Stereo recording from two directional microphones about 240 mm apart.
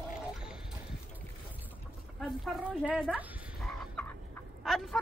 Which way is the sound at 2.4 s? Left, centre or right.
Centre.